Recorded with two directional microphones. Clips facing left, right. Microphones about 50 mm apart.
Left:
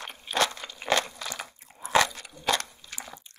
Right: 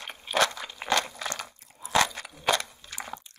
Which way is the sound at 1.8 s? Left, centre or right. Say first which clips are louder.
Left 1 dB; left.